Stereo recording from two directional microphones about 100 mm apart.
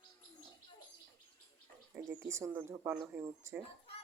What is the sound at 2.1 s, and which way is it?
Speech, 30° right (ahead or behind).